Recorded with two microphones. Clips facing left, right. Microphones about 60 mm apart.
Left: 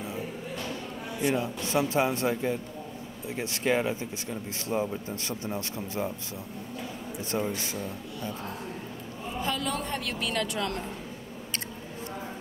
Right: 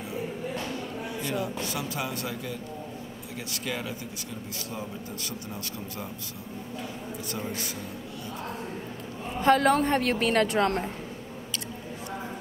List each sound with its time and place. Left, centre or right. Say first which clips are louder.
1.2 s speech: left 4 dB; left
9.4 s a woman's voice: right 11 dB; right